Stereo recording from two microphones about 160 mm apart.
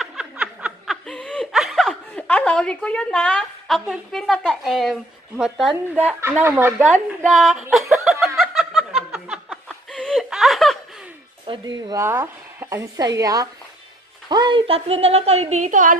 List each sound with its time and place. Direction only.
0.0 s snicker: 5° right (ahead or behind)
5.4 s a woman's voice: centre (ahead or behind)
5.9 s a woman's voice: 10° right (ahead or behind)
7.7 s snicker: centre (ahead or behind)
11.4 s speech: 30° right (ahead or behind); by 16.0 s 55° right (ahead or behind)